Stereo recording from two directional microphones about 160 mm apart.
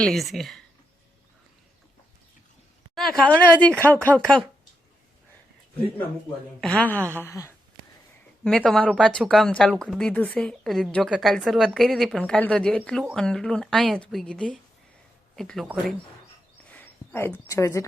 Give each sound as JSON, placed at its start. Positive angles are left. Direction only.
{"t": 0.0, "sound": "speech", "side_deg": 0}
{"t": 2.9, "sound": "speech", "side_deg": 5}
{"t": 6.6, "sound": "speech", "side_deg": 5}
{"t": 8.4, "sound": "speech", "side_deg": 5}
{"t": 16.6, "sound": "a sound", "side_deg": 10}